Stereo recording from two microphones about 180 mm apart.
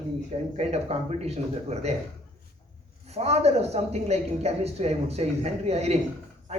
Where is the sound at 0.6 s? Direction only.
35° right (ahead or behind).